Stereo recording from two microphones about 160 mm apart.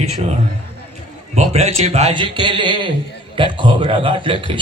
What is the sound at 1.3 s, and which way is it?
A man's voice, 45° right (ahead or behind).